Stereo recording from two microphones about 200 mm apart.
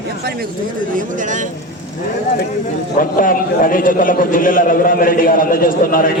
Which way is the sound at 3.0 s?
45° left (ahead or behind).